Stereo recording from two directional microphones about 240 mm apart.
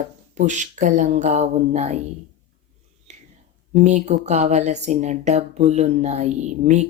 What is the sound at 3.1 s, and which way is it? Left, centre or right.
Whispering, right.